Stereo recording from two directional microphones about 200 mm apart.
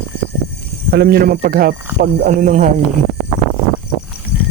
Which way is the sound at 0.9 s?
50° right (ahead or behind).